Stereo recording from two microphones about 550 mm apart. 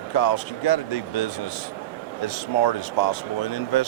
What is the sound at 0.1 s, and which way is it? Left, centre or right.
Speech, left.